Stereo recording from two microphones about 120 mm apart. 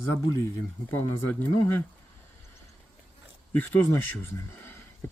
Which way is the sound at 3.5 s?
15° left (ahead or behind).